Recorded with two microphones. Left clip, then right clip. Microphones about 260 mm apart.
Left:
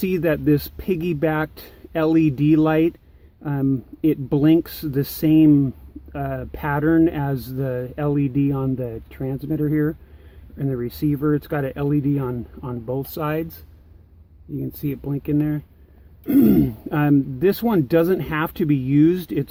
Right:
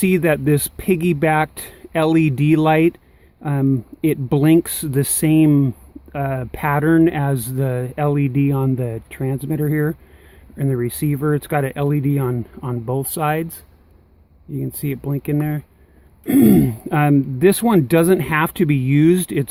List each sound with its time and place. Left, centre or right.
0.0 s speech: right
14.7 s speech: right